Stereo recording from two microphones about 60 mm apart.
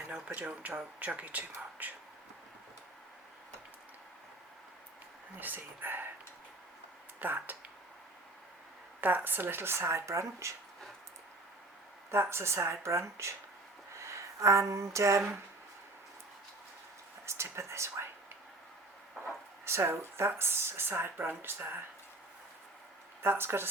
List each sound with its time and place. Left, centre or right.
0.1 s speech: right
5.4 s speech: right
7.2 s speech: right
9.0 s speech: right
12.1 s speech: right
17.2 s speech: right
19.6 s speech: right
23.2 s speech: right